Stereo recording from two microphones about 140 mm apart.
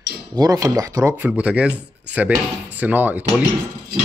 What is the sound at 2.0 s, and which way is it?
Speech, 10° right (ahead or behind).